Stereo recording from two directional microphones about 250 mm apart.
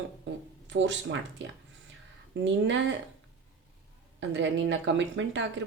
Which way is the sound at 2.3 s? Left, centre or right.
Right.